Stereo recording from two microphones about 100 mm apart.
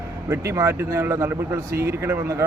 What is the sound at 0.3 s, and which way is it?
Speech, 30° right (ahead or behind).